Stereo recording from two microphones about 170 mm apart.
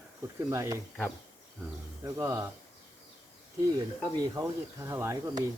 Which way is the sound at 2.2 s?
20° right (ahead or behind).